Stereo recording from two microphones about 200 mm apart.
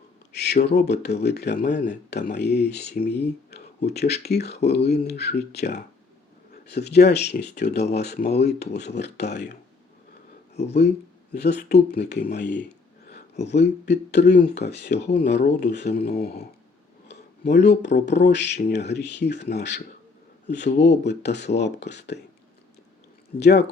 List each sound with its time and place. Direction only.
0.3 s speech: 55° left (ahead or behind)
10.7 s speech: 55° left (ahead or behind)
17.7 s speech: 60° left (ahead or behind)
23.4 s speech: 55° left (ahead or behind)